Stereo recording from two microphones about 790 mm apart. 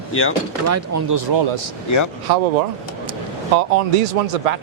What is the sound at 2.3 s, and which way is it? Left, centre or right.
Speech, right.